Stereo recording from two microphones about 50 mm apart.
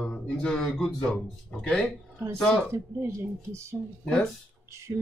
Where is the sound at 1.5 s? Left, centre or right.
Centre.